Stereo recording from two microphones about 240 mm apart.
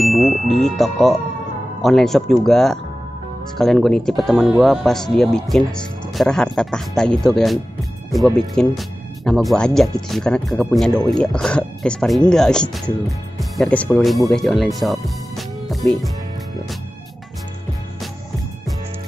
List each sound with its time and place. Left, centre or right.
0.0 s speech: centre